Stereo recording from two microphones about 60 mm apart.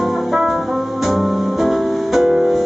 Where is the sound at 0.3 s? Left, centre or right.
Centre.